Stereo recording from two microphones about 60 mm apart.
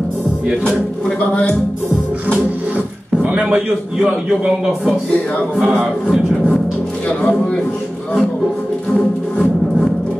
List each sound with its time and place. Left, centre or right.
0.7 s speech: centre
3.3 s a man's voice: centre
7.1 s speech: centre
8.9 s music: centre